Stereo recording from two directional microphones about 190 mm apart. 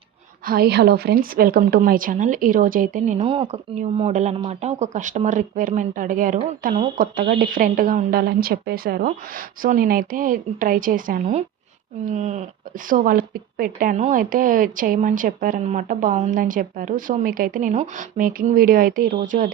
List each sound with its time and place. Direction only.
0.4 s speech: 55° right (ahead or behind); by 12.5 s 40° right (ahead or behind)
12.9 s speech: 50° right (ahead or behind)